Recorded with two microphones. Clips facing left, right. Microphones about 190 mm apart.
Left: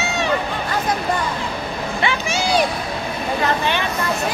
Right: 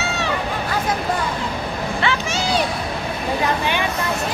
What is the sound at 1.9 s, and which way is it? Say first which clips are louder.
Speech: left 1 dB; 15° left (ahead or behind).